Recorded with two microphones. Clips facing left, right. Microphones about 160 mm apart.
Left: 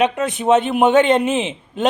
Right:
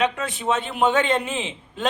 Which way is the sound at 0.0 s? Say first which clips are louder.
Left 6 dB; 20° left (ahead or behind).